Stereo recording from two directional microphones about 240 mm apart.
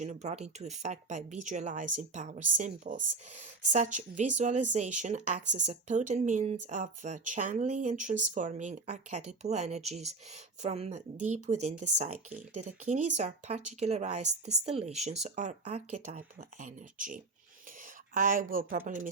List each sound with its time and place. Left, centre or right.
0.0 s speech: right